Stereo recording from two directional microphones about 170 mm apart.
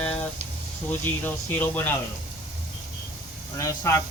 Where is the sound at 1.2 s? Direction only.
10° left (ahead or behind).